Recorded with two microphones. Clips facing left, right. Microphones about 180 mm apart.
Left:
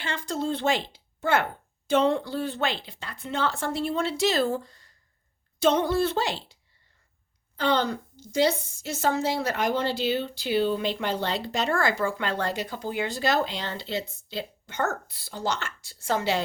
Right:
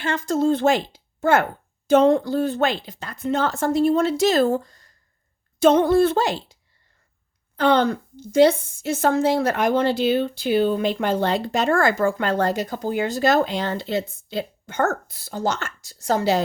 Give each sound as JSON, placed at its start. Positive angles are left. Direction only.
{"t": 0.0, "sound": "a woman's voice", "side_deg": -45}